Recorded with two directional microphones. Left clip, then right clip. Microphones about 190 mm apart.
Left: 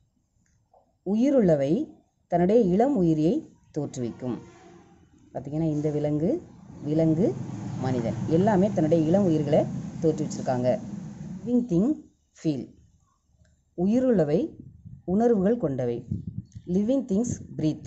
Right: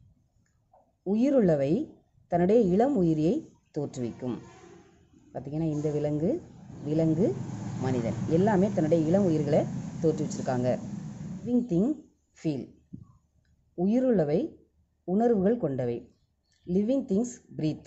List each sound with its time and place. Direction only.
1.0 s a woman's voice: 5° left (ahead or behind)
13.7 s a woman's voice: 5° left (ahead or behind)